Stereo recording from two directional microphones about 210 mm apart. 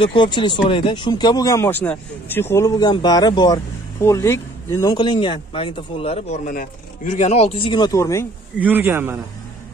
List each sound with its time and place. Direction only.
0.0 s speech: 25° left (ahead or behind)
8.5 s a man's voice: 10° right (ahead or behind)